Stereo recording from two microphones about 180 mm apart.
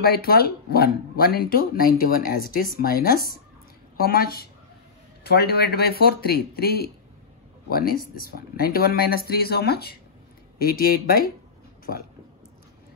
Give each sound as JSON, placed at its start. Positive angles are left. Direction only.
{"t": 0.0, "sound": "speech", "side_deg": 60}